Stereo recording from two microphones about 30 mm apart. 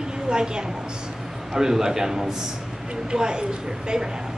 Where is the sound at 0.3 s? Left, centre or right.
Right.